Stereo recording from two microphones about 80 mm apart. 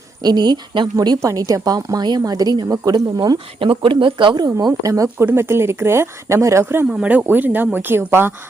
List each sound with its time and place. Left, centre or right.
0.2 s a woman's voice: right
0.9 s a woman's voice: right
4.6 s speech: right
5.0 s speech: right
6.8 s speech: centre; by 8.3 s right